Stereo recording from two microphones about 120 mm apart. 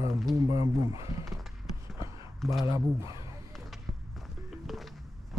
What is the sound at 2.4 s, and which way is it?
Speech, centre (ahead or behind).